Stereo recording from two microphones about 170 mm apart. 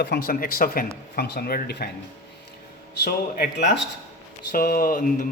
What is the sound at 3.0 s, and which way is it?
Speech, 75° left (ahead or behind).